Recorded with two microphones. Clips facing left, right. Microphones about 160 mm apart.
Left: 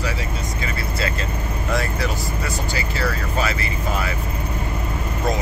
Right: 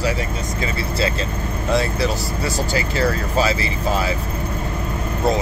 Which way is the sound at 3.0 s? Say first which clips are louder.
Right 5 dB; 35° right (ahead or behind).